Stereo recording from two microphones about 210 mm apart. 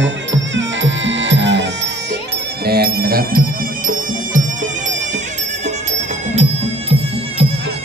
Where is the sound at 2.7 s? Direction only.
45° right (ahead or behind).